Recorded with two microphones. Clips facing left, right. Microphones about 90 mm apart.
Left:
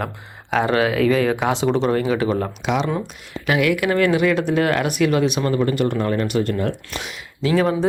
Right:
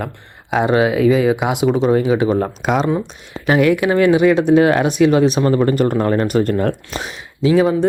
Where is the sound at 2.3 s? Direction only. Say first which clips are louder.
Right 4 dB; 30° right (ahead or behind).